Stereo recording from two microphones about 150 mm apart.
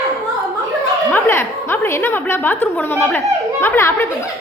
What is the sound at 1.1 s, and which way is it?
A woman's voice, 15° left (ahead or behind).